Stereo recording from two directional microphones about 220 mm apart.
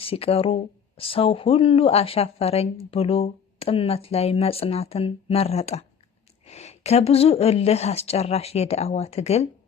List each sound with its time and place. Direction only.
0.0 s a woman's voice: 25° left (ahead or behind)